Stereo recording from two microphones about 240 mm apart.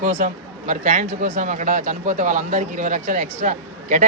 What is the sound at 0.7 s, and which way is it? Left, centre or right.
Speech, right.